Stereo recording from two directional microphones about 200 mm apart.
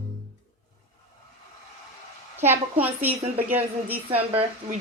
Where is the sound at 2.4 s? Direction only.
10° right (ahead or behind).